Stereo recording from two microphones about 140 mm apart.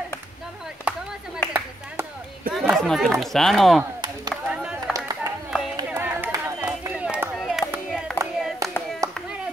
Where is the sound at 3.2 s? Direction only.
Centre (ahead or behind).